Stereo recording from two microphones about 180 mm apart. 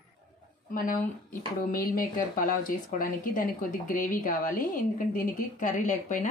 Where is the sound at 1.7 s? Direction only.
50° left (ahead or behind).